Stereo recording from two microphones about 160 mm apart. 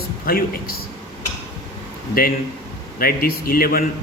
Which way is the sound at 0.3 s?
70° left (ahead or behind).